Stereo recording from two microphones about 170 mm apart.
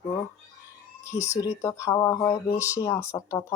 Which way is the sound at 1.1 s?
20° left (ahead or behind).